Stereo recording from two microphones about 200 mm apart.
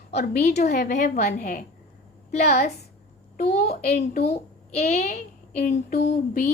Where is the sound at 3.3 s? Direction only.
40° left (ahead or behind).